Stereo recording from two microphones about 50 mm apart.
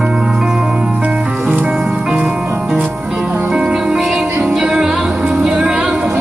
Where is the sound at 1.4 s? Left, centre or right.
Right.